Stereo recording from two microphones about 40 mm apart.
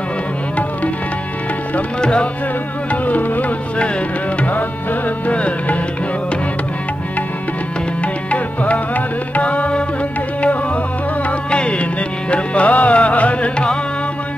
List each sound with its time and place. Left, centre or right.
2.0 s music: left
2.9 s music: left
5.3 s music: left
8.0 s music: left
11.5 s music: left